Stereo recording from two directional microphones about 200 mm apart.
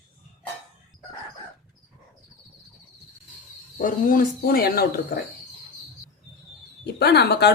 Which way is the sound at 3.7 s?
45° left (ahead or behind).